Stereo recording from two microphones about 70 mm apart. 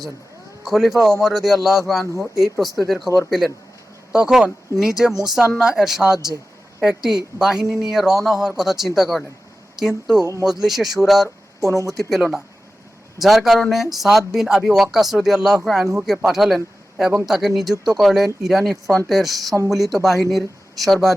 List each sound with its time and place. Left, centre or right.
0.6 s speech: centre
10.2 s speech: right
10.4 s speech: centre